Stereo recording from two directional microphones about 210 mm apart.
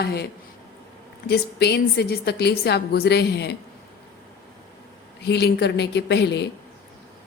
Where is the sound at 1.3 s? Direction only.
50° left (ahead or behind).